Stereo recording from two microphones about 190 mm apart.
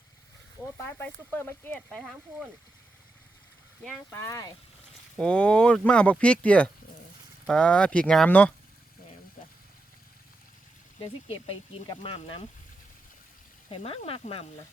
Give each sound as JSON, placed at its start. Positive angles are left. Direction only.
{"t": 0.8, "sound": "speech", "side_deg": 10}
{"t": 3.8, "sound": "speech", "side_deg": 10}
{"t": 11.0, "sound": "speech", "side_deg": 25}
{"t": 13.7, "sound": "speech", "side_deg": 30}